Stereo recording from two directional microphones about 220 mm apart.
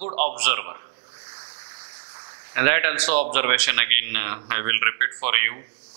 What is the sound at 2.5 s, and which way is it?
A man's voice, 15° right (ahead or behind).